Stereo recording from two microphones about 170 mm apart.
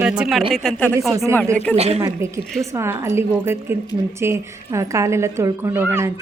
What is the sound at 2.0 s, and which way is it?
Speech, 15° right (ahead or behind).